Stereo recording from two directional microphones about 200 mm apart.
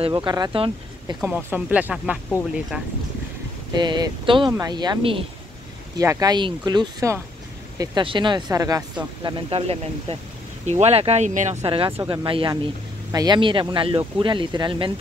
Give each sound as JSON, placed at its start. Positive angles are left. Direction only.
{"t": 0.0, "sound": "speech", "side_deg": -20}
{"t": 1.2, "sound": "speech", "side_deg": -10}
{"t": 3.7, "sound": "speech", "side_deg": -20}
{"t": 9.2, "sound": "speech", "side_deg": -30}